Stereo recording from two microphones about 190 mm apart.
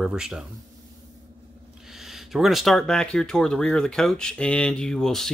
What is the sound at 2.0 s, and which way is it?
Speech, centre (ahead or behind).